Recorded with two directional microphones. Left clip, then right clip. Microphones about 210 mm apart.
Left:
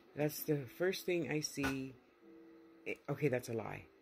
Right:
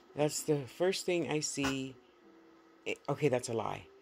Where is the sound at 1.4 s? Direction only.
60° right (ahead or behind).